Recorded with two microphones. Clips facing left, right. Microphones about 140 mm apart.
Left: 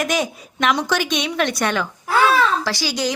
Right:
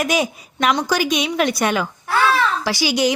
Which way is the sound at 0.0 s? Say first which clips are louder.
Right 2 dB; 10° right (ahead or behind).